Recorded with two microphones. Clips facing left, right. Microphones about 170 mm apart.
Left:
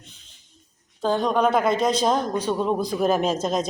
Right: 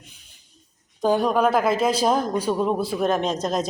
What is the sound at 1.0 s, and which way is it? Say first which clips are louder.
A man's voice: right 1 dB; 10° right (ahead or behind).